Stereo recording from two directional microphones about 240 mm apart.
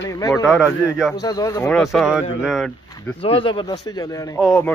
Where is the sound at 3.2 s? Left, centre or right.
Left.